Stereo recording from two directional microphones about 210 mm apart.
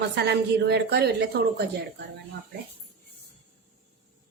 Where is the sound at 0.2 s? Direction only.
50° right (ahead or behind).